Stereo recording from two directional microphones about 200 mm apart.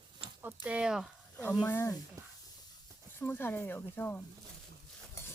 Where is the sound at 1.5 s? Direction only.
10° left (ahead or behind).